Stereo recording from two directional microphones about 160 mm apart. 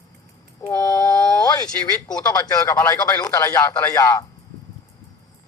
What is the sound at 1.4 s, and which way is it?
Speech, 25° left (ahead or behind).